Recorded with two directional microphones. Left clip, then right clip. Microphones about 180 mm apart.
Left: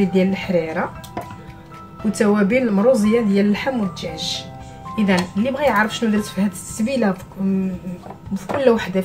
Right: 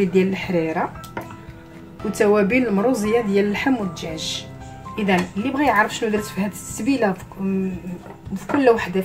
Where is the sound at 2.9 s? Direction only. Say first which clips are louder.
Left 2 dB; 40° right (ahead or behind).